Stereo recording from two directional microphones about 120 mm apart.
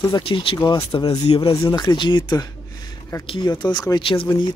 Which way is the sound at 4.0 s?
50° left (ahead or behind).